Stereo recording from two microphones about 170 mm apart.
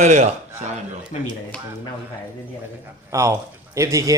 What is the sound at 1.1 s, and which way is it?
Speech, 40° left (ahead or behind).